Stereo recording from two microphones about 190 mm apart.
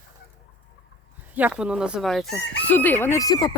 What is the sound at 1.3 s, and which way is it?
Speech, 10° right (ahead or behind).